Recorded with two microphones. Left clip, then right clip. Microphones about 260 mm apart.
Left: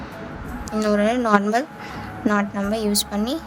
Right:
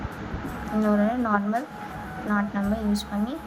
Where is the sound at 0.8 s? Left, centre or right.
Left.